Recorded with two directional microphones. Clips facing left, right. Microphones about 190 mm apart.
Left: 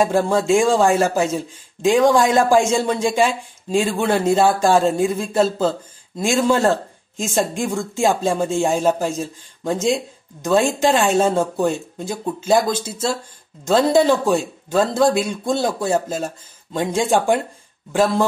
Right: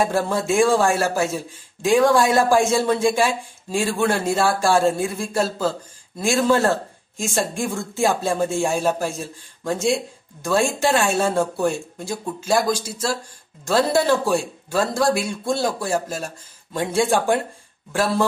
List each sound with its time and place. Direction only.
0.0 s speech: 15° left (ahead or behind)